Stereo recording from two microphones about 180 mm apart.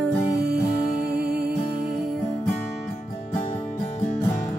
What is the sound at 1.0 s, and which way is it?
Music, 65° right (ahead or behind).